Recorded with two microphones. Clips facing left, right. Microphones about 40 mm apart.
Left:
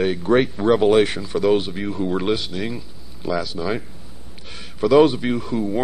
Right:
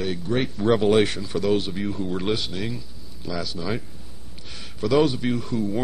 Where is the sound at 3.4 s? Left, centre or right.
Centre.